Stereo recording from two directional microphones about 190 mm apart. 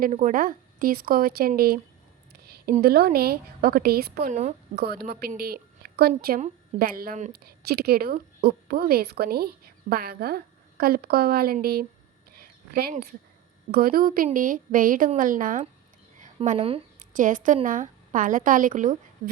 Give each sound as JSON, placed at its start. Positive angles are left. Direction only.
{"t": 0.0, "sound": "a woman's voice", "side_deg": -40}
{"t": 2.8, "sound": "a woman's voice", "side_deg": -55}
{"t": 7.3, "sound": "a woman's voice", "side_deg": -55}
{"t": 16.6, "sound": "a sound", "side_deg": -30}
{"t": 17.2, "sound": "a woman's voice", "side_deg": -45}